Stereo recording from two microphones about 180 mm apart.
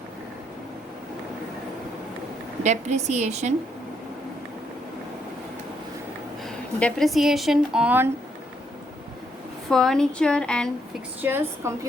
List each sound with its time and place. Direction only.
2.6 s a woman's voice: 40° right (ahead or behind)
6.4 s a woman's voice: 5° left (ahead or behind)
9.6 s a woman's voice: centre (ahead or behind)
11.2 s a woman's voice: 10° right (ahead or behind)